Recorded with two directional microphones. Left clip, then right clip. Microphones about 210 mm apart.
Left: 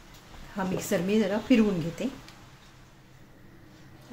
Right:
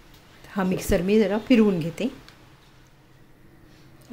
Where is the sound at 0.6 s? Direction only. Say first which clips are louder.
Right 5 dB; 35° right (ahead or behind).